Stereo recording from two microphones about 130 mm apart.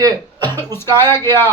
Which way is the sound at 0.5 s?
20° left (ahead or behind).